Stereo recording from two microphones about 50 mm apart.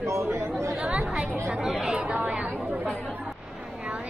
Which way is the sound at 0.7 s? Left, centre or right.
Right.